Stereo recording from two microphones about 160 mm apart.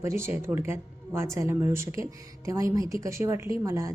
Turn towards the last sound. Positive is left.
turn(degrees=-20)  # may be behind; listen again after turning